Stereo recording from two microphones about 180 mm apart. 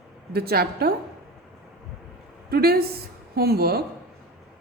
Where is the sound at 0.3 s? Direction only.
60° right (ahead or behind).